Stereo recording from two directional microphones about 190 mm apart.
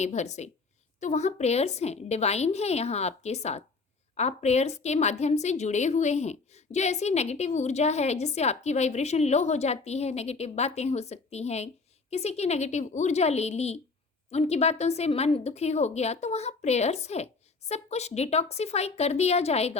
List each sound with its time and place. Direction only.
0.0 s a woman's voice: 35° left (ahead or behind)